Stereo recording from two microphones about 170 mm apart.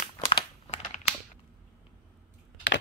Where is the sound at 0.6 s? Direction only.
40° left (ahead or behind).